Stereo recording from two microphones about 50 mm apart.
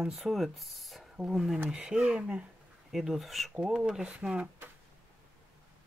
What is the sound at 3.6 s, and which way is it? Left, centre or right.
Speech, centre.